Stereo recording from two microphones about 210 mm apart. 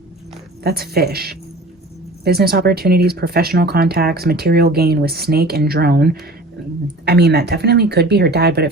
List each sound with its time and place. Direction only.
0.6 s speech: 50° right (ahead or behind)